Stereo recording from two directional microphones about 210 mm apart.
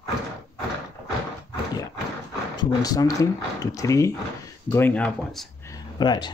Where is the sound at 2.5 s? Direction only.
20° left (ahead or behind); by 5.5 s 5° left (ahead or behind).